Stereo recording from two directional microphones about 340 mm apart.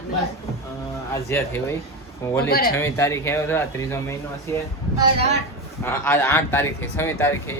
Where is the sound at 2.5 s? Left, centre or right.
Left.